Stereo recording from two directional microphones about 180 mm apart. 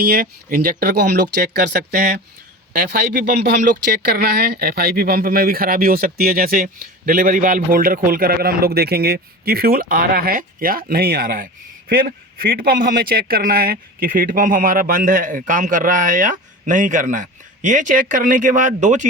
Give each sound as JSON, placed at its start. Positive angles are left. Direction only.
{"t": 0.0, "sound": "speech", "side_deg": -60}